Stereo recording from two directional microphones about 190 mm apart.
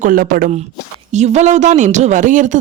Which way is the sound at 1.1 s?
35° right (ahead or behind).